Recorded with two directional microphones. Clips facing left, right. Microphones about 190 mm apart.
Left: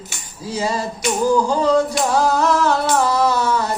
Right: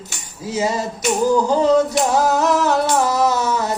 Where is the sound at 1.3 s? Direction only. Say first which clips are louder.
Right 2 dB; 20° right (ahead or behind).